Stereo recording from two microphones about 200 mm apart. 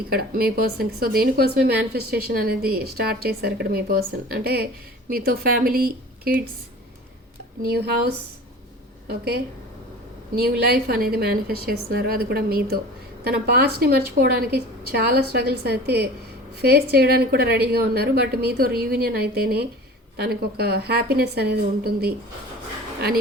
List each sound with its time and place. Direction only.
0.1 s a woman's voice: 50° right (ahead or behind)
7.7 s a woman's voice: 50° right (ahead or behind)